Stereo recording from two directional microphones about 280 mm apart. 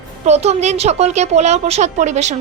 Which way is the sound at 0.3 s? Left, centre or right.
Right.